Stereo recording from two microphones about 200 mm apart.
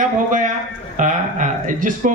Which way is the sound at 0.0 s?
40° right (ahead or behind).